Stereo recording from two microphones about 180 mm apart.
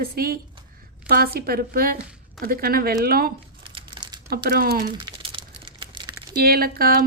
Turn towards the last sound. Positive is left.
turn(degrees=-55)  # may be behind; listen again after turning